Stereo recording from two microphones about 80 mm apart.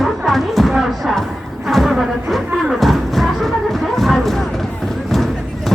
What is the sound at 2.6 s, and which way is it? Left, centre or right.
Music, centre.